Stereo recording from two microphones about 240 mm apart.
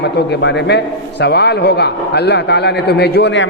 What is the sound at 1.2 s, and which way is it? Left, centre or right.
A man's voice, left.